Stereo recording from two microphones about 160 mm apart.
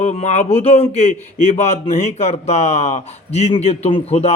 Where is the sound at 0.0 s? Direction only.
45° left (ahead or behind).